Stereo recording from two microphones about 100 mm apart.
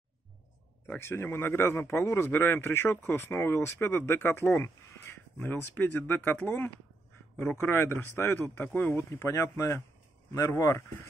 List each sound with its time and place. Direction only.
0.8 s speech: 25° left (ahead or behind)